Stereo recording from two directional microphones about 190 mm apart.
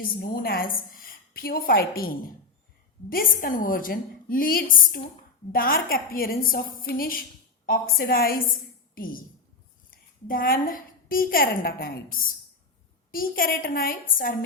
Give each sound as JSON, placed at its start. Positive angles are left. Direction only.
{"t": 0.2, "sound": "a woman's voice", "side_deg": 50}